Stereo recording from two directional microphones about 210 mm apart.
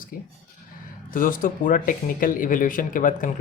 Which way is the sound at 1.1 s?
40° left (ahead or behind).